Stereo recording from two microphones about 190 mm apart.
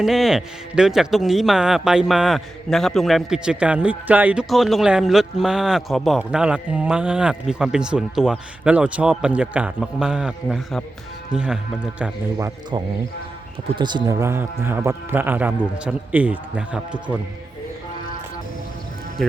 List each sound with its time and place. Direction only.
0.0 s a man's voice: centre (ahead or behind)
12.4 s a man's voice: 15° right (ahead or behind)
19.2 s music: centre (ahead or behind)